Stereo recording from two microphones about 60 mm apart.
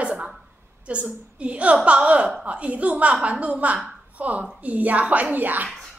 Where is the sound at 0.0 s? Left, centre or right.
Right.